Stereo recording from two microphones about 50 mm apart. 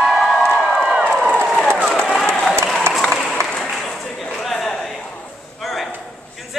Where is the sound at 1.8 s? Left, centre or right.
Centre.